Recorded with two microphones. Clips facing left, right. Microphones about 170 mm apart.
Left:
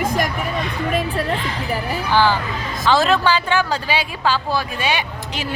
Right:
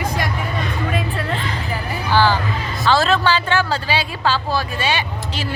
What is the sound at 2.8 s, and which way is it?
Speech, 15° left (ahead or behind).